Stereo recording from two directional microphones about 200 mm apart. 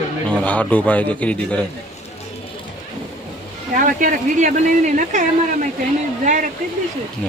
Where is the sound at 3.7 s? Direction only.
40° right (ahead or behind).